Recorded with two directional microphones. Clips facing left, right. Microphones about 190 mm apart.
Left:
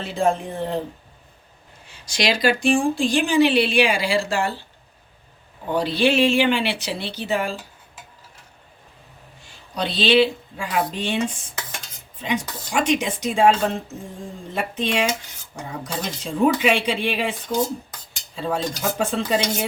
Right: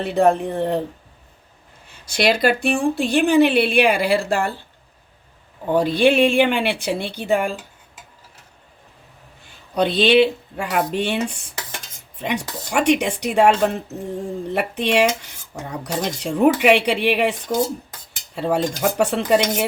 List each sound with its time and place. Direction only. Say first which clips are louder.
0.0 s a woman's voice: right 5 dB; 60° right (ahead or behind)
1.9 s a woman's voice: right 4 dB; 55° right (ahead or behind)
5.7 s speech: right 4 dB; 50° right (ahead or behind)
9.4 s a woman's voice: right 7 dB; 55° right (ahead or behind)
18.3 s speech: right 4 dB; 65° right (ahead or behind)